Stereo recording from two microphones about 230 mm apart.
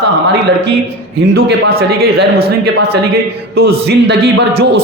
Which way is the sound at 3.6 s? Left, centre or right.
Right.